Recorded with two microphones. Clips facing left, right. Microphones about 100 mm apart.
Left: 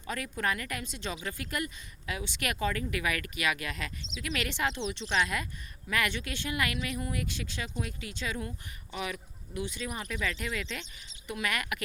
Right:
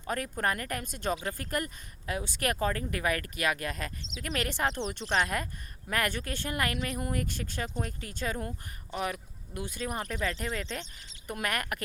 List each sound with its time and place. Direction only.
0.1 s speech: 45° right (ahead or behind)
11.3 s speech: 50° right (ahead or behind)